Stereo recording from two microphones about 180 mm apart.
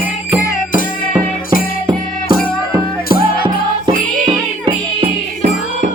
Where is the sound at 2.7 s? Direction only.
20° right (ahead or behind).